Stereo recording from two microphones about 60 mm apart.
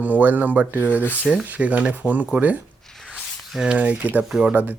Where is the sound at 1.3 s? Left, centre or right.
Right.